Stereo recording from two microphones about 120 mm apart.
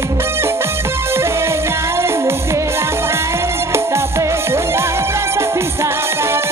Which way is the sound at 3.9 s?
20° right (ahead or behind).